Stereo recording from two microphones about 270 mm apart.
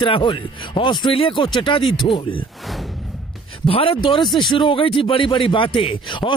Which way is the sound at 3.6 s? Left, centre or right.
Left.